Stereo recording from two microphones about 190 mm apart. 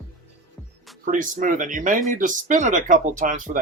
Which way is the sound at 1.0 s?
45° right (ahead or behind).